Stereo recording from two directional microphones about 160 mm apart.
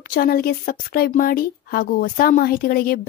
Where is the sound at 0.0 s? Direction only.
65° left (ahead or behind).